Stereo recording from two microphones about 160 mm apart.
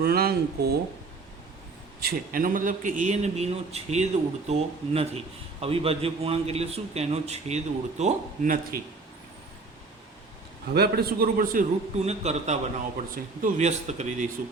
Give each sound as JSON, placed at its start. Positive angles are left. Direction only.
{"t": 0.0, "sound": "a man's voice", "side_deg": -75}
{"t": 2.0, "sound": "a man's voice", "side_deg": -65}
{"t": 10.8, "sound": "a man's voice", "side_deg": -80}
{"t": 11.9, "sound": "a man's voice", "side_deg": -45}